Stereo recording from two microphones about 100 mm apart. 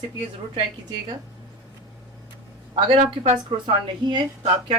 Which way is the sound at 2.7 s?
65° right (ahead or behind).